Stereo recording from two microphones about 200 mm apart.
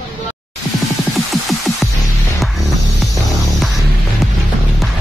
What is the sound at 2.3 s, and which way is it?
Music, centre (ahead or behind).